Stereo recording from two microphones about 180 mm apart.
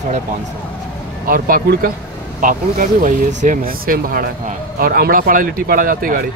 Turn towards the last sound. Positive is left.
turn(degrees=-50)  # may be behind; listen again after turning